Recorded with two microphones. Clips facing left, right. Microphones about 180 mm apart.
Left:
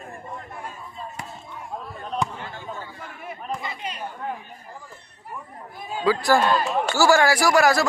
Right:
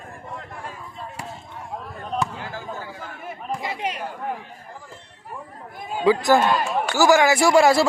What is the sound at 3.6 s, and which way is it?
Chatter, 90° right.